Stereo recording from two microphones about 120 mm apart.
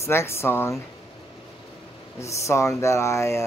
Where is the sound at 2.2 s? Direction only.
25° left (ahead or behind).